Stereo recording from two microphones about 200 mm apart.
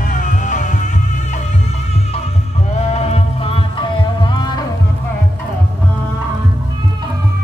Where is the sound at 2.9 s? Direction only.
35° left (ahead or behind).